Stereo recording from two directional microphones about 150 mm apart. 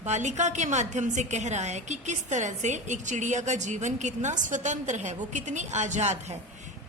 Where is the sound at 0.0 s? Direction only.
50° right (ahead or behind).